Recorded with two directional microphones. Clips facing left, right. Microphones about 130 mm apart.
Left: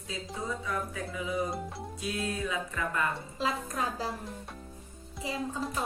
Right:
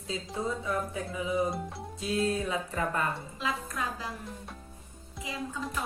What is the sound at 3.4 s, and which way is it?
Speech, 35° left (ahead or behind).